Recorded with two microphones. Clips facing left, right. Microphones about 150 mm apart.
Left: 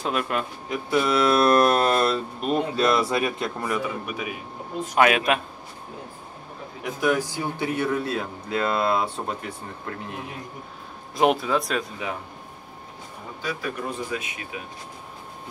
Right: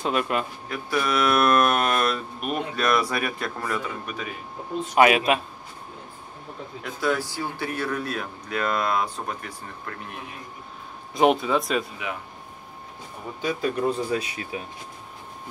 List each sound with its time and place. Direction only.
0.0 s speech: centre (ahead or behind)
0.7 s speech: 25° left (ahead or behind)
4.9 s speech: 5° right (ahead or behind)
6.8 s speech: 15° left (ahead or behind)
11.1 s speech: centre (ahead or behind)
12.0 s speech: 35° left (ahead or behind)
13.4 s speech: 20° right (ahead or behind)
14.1 s speech: 35° right (ahead or behind)